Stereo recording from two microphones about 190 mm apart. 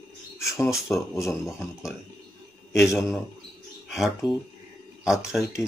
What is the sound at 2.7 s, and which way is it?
Speech, centre (ahead or behind).